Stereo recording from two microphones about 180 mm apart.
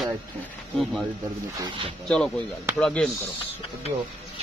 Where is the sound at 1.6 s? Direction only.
25° right (ahead or behind).